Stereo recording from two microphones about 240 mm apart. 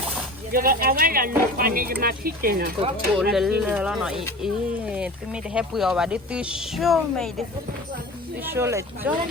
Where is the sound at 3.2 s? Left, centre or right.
Centre.